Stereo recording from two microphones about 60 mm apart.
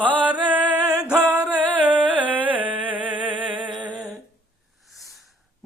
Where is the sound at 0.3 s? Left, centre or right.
Right.